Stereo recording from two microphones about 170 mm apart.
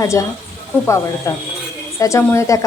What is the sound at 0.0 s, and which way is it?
Speech, 20° left (ahead or behind).